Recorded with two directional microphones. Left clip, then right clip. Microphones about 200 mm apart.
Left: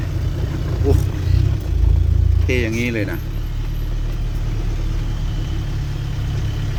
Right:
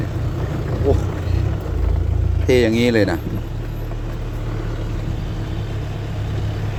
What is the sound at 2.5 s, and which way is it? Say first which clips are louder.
Speech: right 6 dB; 25° right (ahead or behind).